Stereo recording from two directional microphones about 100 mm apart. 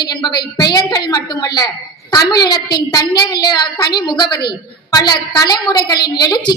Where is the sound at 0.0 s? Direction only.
45° left (ahead or behind).